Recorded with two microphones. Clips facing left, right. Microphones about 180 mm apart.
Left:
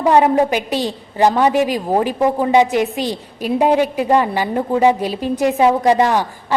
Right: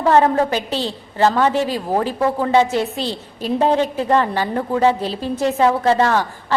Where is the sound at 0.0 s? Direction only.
15° left (ahead or behind).